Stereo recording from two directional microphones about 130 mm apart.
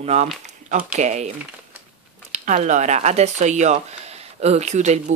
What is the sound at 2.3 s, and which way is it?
Speech, 70° right (ahead or behind).